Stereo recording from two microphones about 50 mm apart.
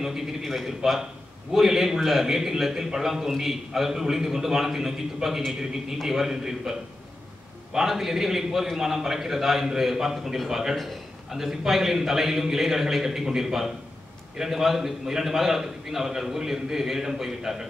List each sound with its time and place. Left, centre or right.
0.0 s a man's voice: centre